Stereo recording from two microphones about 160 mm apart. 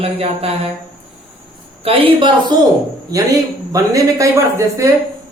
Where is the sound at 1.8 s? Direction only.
35° right (ahead or behind).